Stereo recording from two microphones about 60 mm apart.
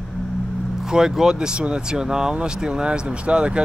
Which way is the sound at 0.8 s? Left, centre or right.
Centre.